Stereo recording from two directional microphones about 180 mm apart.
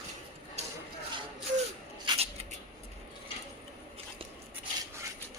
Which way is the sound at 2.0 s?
35° right (ahead or behind).